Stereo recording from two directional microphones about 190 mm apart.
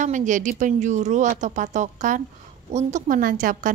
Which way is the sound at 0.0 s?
40° right (ahead or behind).